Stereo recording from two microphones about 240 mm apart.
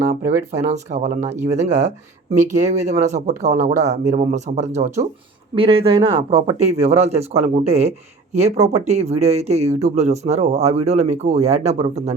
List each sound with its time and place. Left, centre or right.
0.2 s speech: centre
0.7 s speech: right
1.2 s speech: centre
2.4 s speech: right